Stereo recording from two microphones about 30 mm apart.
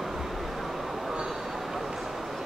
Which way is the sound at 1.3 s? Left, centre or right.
Centre.